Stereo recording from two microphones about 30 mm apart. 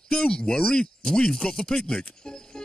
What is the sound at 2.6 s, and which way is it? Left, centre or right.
Music, left.